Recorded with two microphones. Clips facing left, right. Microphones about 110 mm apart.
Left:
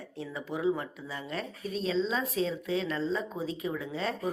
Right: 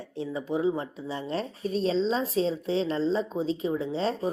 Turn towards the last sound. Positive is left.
turn(degrees=-25)  # may be behind; listen again after turning